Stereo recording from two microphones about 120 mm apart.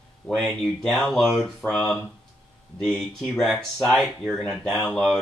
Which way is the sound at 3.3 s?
5° left (ahead or behind).